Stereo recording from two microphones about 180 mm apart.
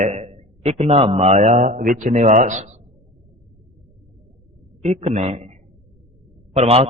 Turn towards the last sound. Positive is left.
turn(degrees=-35)  # may be behind; listen again after turning